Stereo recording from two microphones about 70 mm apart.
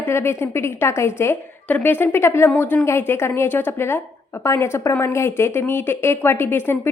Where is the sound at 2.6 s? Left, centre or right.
Left.